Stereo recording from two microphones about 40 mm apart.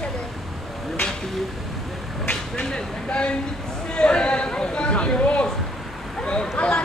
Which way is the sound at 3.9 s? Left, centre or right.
Left.